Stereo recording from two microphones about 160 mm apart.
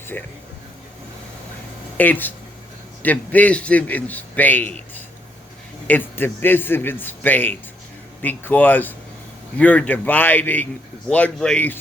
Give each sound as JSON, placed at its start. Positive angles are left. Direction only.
{"t": 0.1, "sound": "a man's voice", "side_deg": 10}
{"t": 2.0, "sound": "a man's voice", "side_deg": 10}